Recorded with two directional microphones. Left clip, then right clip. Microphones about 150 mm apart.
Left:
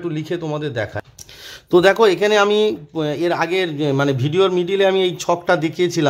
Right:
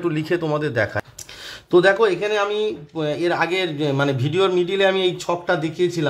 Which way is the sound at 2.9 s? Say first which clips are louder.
Right 1 dB; 30° left (ahead or behind).